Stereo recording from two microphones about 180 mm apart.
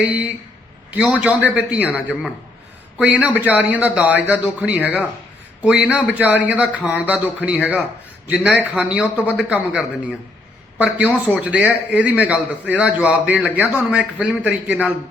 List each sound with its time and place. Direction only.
0.0 s a man's voice: 10° right (ahead or behind)